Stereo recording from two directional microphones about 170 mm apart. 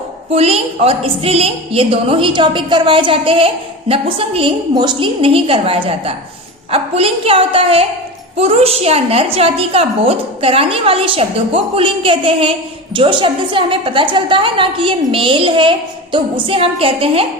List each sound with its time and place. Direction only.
0.3 s a woman's voice: 35° right (ahead or behind)